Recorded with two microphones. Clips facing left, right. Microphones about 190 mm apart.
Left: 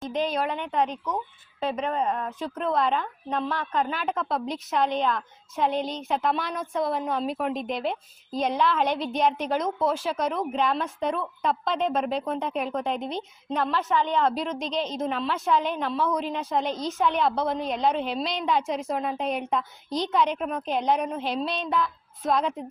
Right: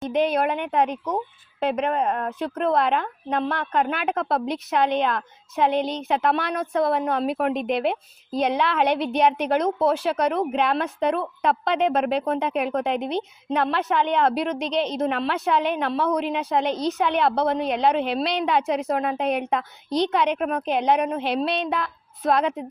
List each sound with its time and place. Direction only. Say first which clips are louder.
0.1 s a woman's voice: right 5 dB; 60° right (ahead or behind)